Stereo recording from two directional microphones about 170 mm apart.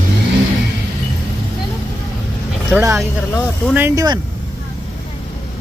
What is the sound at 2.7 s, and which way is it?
Speech, 15° right (ahead or behind).